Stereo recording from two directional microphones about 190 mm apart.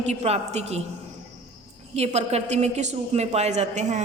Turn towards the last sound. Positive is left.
turn(degrees=-35)  # may be behind; listen again after turning